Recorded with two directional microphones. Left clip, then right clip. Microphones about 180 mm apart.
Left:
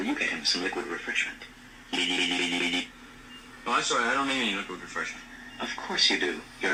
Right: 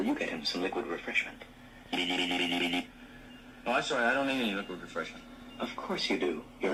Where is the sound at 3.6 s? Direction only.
20° right (ahead or behind).